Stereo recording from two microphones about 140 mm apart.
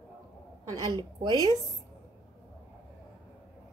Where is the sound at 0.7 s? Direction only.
30° right (ahead or behind).